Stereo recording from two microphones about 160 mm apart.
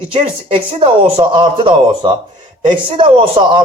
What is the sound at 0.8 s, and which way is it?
A man's voice, 30° right (ahead or behind).